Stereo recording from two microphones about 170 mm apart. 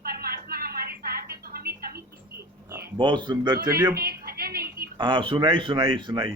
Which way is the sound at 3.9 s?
65° right (ahead or behind).